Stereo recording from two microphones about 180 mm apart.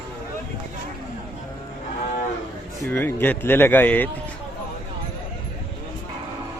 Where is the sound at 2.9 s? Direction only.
10° left (ahead or behind).